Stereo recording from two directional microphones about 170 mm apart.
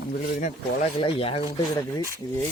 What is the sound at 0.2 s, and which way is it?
Speech, 55° left (ahead or behind).